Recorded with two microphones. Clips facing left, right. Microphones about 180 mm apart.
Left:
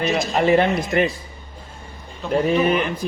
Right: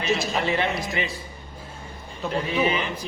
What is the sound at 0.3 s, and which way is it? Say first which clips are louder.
Speech: left 8 dB; 55° left (ahead or behind).